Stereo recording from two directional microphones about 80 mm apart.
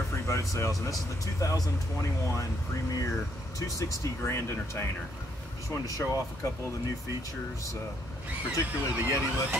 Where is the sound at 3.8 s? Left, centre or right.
Left.